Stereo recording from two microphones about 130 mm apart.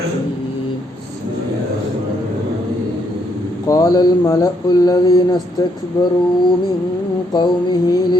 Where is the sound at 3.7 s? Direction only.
30° left (ahead or behind).